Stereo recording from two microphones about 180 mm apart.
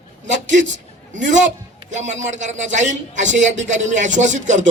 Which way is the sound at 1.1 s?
45° right (ahead or behind).